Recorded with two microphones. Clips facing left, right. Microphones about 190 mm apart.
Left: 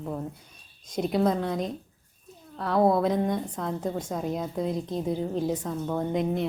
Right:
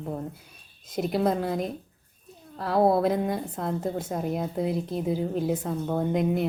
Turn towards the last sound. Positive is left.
turn(degrees=-5)  # may be behind; listen again after turning